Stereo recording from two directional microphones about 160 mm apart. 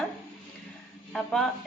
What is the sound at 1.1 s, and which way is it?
Speech, 5° left (ahead or behind).